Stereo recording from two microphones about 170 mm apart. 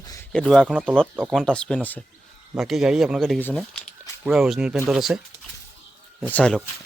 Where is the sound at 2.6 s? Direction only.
Centre (ahead or behind).